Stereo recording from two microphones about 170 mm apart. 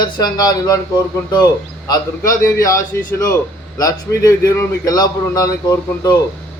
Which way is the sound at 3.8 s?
20° left (ahead or behind).